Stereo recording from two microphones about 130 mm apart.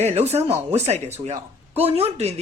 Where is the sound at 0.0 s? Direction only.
55° right (ahead or behind).